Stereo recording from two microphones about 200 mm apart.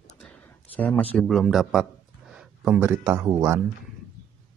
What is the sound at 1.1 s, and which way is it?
Speech, centre (ahead or behind).